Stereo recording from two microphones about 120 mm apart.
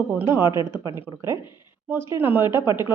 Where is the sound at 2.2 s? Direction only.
15° right (ahead or behind).